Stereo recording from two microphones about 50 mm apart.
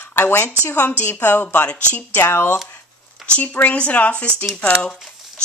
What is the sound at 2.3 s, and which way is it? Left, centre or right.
Speech, left.